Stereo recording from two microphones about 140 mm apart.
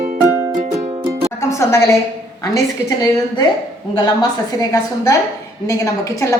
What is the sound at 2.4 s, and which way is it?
Speech, 25° left (ahead or behind).